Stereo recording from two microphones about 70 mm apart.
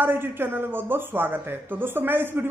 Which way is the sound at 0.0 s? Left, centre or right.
Right.